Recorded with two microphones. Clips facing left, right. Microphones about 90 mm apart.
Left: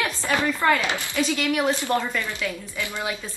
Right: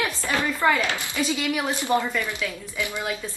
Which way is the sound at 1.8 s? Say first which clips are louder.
Right 1 dB; 20° right (ahead or behind).